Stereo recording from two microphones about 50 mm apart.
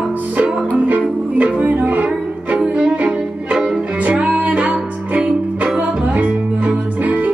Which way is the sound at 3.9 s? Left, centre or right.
Right.